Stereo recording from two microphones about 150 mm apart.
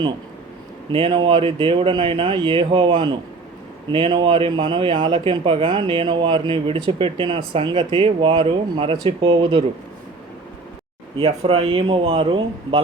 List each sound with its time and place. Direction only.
0.9 s speech: 35° right (ahead or behind)
11.2 s speech: 40° right (ahead or behind)